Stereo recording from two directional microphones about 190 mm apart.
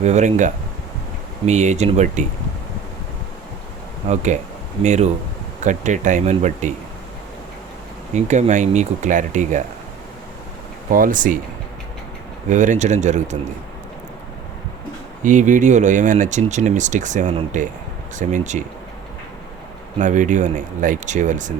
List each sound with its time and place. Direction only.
0.0 s speech: 35° right (ahead or behind)
4.0 s speech: 35° right (ahead or behind)
8.1 s speech: 40° right (ahead or behind)
10.9 s speech: 45° right (ahead or behind)
12.5 s speech: 40° right (ahead or behind)
15.2 s speech: 40° right (ahead or behind)
20.0 s speech: 40° right (ahead or behind)